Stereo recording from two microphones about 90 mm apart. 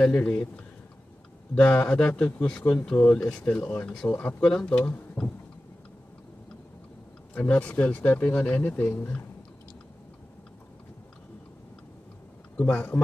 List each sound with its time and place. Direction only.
0.0 s speech: 15° left (ahead or behind)
1.5 s speech: 15° left (ahead or behind)
4.4 s speech: 10° left (ahead or behind)
4.7 s speech: 20° left (ahead or behind)
7.3 s speech: 15° left (ahead or behind)
12.5 s speech: 20° left (ahead or behind)